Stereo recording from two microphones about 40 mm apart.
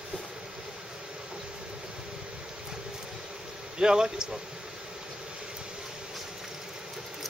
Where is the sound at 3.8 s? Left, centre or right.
Centre.